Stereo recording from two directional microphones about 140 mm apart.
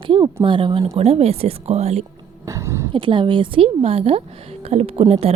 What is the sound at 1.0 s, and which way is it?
A woman's voice, 50° right (ahead or behind).